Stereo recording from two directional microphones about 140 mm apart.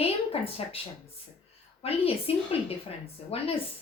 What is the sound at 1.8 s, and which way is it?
Speech, 45° left (ahead or behind).